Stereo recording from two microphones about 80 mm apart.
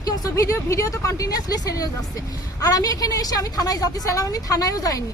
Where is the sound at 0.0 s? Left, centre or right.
Left.